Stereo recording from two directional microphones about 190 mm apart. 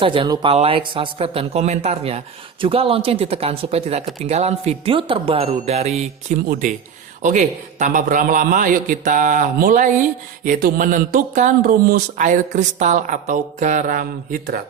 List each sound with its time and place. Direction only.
0.0 s speech: 25° right (ahead or behind); by 14.6 s 45° right (ahead or behind)